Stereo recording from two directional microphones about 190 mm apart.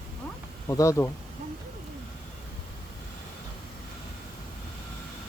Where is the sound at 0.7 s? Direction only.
15° left (ahead or behind).